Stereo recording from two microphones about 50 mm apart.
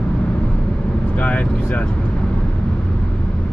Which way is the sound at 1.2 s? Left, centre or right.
Left.